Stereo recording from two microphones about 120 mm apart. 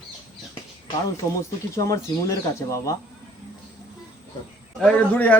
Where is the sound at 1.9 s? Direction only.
25° left (ahead or behind).